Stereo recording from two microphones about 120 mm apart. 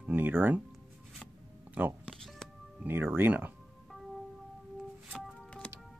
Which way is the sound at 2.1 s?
5° left (ahead or behind).